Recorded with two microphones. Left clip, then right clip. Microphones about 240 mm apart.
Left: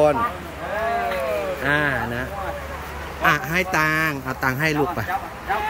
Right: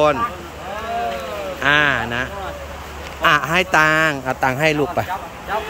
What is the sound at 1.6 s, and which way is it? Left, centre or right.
A man's voice, centre.